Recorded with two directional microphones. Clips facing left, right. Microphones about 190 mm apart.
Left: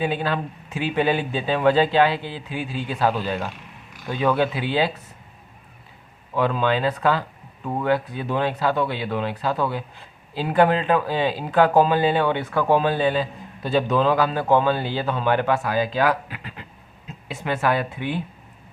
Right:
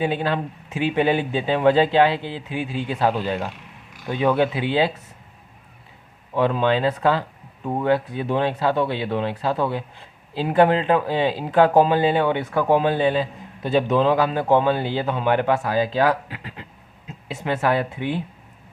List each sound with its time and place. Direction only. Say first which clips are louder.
0.0 s speech: right 1 dB; 25° right (ahead or behind)
6.3 s speech: right 2 dB; 25° right (ahead or behind)